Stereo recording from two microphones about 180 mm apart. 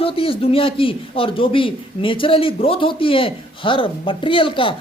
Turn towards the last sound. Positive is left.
turn(degrees=30)  # may be behind; listen again after turning